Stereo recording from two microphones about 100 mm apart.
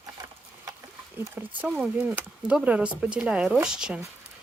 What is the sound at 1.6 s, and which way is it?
Speech, 15° right (ahead or behind).